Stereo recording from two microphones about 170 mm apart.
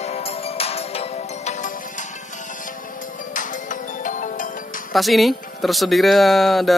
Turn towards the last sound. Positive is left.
turn(degrees=0)  # may be behind; listen again after turning